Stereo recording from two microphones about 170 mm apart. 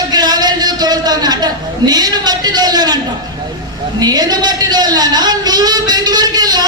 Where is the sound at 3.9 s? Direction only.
25° right (ahead or behind).